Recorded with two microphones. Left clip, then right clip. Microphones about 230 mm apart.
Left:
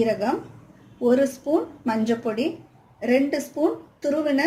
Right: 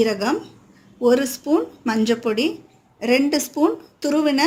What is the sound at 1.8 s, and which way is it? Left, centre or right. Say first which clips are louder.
Speech: right 4 dB; right.